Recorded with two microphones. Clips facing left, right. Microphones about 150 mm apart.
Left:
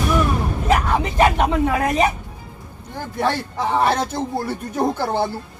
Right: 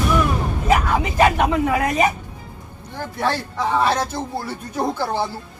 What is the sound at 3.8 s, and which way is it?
Speech, 55° left (ahead or behind).